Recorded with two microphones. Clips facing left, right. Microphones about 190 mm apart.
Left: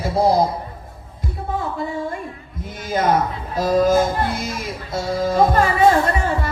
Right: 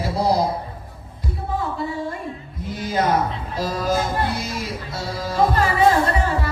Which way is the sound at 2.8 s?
50° left (ahead or behind).